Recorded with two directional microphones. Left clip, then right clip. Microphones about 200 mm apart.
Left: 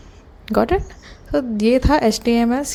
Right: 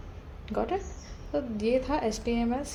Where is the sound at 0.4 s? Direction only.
40° left (ahead or behind).